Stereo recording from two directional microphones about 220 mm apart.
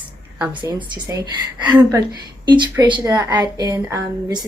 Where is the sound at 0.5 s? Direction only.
20° right (ahead or behind).